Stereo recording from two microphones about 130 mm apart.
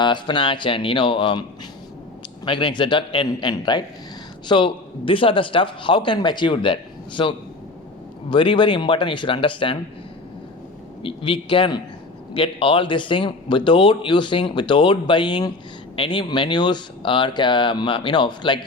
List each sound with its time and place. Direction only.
0.0 s speech: 35° left (ahead or behind)
11.0 s speech: 40° left (ahead or behind)